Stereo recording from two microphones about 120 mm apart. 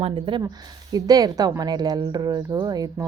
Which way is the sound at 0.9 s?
30° right (ahead or behind).